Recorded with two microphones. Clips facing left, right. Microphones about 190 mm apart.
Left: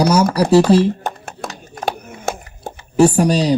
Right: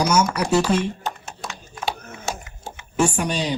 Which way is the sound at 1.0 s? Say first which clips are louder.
Left 5 dB; 55° left (ahead or behind).